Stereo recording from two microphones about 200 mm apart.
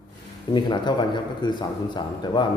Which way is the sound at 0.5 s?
20° left (ahead or behind).